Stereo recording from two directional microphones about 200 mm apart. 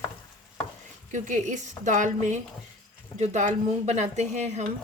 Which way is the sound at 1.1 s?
40° right (ahead or behind).